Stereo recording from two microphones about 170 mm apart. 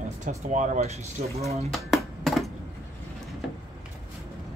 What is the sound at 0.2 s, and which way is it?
Speech, 45° right (ahead or behind).